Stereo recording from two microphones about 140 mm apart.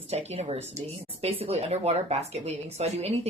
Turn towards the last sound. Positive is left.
turn(degrees=-50)  # may be behind; listen again after turning